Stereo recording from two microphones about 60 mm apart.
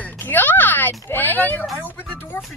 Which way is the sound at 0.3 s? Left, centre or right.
Left.